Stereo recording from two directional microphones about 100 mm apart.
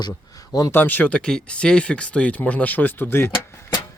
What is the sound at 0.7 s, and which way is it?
Speech, 20° left (ahead or behind).